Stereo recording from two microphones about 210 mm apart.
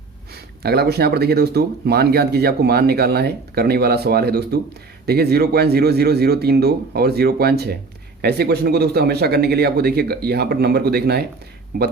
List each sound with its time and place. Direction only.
0.6 s speech: 50° right (ahead or behind)